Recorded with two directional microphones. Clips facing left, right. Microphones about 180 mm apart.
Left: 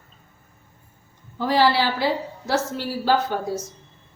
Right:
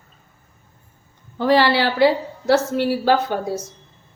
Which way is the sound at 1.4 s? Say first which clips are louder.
Right 3 dB; 70° right (ahead or behind).